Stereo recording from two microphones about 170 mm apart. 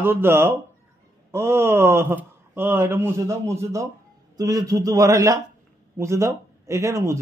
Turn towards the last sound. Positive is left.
turn(degrees=-15)  # may be behind; listen again after turning